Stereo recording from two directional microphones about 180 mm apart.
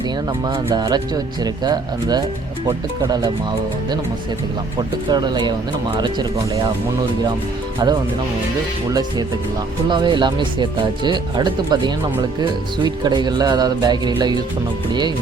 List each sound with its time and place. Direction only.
0.3 s speech: 25° right (ahead or behind)
5.0 s speech: 25° right (ahead or behind)
7.8 s speech: 20° right (ahead or behind)